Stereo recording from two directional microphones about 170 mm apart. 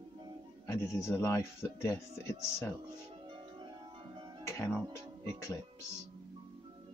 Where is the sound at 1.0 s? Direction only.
15° left (ahead or behind).